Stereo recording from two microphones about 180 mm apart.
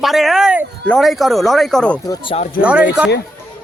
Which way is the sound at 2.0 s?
25° left (ahead or behind).